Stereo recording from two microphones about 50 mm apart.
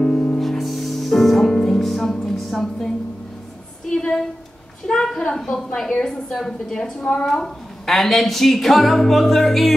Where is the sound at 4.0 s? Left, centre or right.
Centre.